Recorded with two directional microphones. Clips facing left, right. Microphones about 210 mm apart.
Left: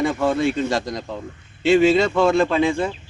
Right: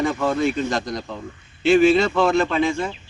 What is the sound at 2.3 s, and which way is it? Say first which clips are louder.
Speech: left 2 dB; 30° left (ahead or behind).